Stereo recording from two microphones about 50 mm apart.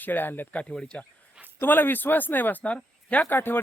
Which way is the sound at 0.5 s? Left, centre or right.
Left.